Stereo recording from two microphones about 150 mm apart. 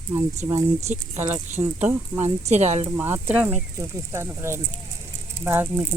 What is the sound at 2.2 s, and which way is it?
Speech, 45° right (ahead or behind).